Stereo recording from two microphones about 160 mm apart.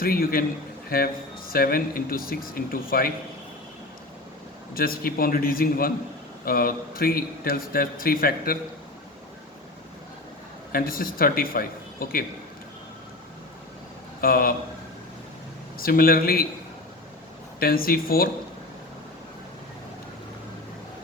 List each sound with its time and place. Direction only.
0.0 s a man's voice: 65° left (ahead or behind)
4.7 s a man's voice: 65° left (ahead or behind)
10.7 s a man's voice: 65° left (ahead or behind)
14.2 s speech: 65° left (ahead or behind)
15.8 s a man's voice: 70° left (ahead or behind)
17.6 s a man's voice: 65° left (ahead or behind)